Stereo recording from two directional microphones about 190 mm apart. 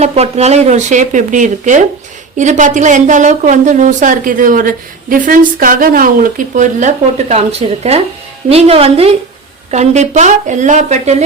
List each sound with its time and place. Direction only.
0.0 s a woman's voice: 35° right (ahead or behind)